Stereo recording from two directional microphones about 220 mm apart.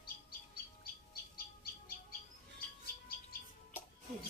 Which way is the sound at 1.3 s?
40° left (ahead or behind).